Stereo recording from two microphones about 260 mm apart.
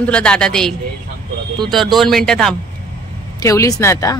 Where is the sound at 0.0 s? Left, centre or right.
Centre.